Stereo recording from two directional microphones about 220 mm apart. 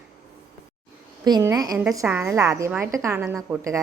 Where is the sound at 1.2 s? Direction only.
15° right (ahead or behind).